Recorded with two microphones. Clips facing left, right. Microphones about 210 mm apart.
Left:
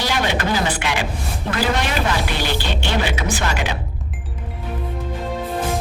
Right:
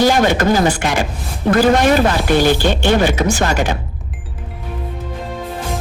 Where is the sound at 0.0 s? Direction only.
45° right (ahead or behind).